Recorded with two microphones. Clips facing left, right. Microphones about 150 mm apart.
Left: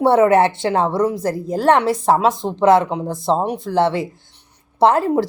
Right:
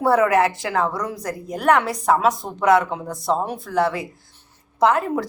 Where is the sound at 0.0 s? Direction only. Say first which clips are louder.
Left 4 dB; 25° left (ahead or behind).